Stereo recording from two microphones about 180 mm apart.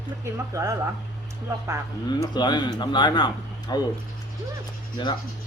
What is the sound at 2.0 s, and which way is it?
Speech, 25° left (ahead or behind).